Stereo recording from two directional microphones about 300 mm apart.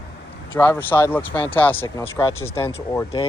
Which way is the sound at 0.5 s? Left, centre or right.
Centre.